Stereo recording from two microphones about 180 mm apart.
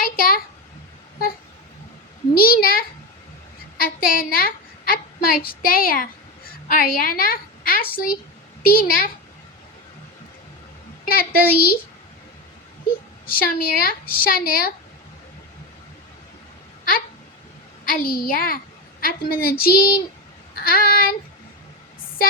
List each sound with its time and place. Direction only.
0.0 s a sound: 55° left (ahead or behind)
2.3 s a sound: 55° left (ahead or behind)
3.8 s a woman's voice: 55° left (ahead or behind)
11.0 s speech: 55° left (ahead or behind)
13.2 s speech: 55° left (ahead or behind)
17.8 s a woman's voice: 55° left (ahead or behind)